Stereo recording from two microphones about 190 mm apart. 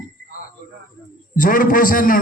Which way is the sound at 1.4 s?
45° left (ahead or behind).